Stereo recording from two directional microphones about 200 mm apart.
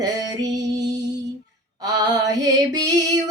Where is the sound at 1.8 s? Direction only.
20° right (ahead or behind).